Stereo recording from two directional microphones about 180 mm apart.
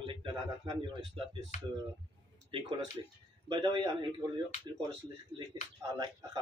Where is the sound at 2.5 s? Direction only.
30° right (ahead or behind).